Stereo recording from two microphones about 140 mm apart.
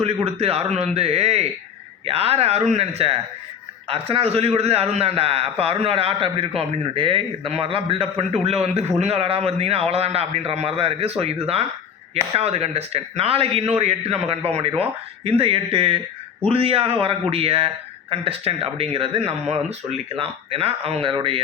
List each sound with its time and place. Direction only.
0.0 s speech: 45° right (ahead or behind)